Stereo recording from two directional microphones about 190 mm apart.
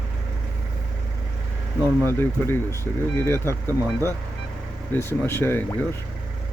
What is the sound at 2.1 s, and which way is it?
Speech, 10° left (ahead or behind).